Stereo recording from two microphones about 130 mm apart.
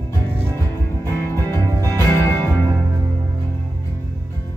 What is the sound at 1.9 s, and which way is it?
Music, 15° left (ahead or behind).